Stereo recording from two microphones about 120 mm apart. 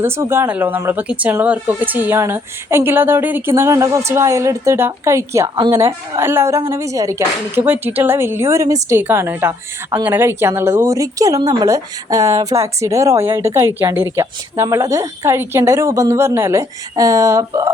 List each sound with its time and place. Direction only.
0.0 s speech: 20° right (ahead or behind)
7.6 s speech: 15° right (ahead or behind)